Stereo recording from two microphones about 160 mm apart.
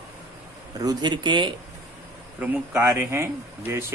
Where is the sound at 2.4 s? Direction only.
15° right (ahead or behind).